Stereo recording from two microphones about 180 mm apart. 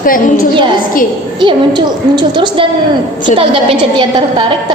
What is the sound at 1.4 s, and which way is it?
A woman's voice, 25° right (ahead or behind).